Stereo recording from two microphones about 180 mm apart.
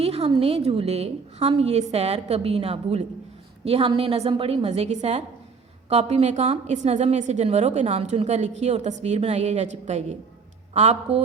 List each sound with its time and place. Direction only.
0.0 s a woman's voice: 35° right (ahead or behind)